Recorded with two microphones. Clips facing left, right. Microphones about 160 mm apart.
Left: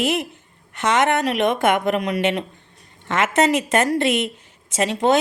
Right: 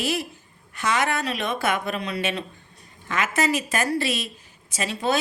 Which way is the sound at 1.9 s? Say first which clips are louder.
Left 7 dB; 65° left (ahead or behind).